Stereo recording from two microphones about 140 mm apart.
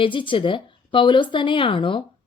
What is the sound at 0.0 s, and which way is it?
Speech, 35° left (ahead or behind).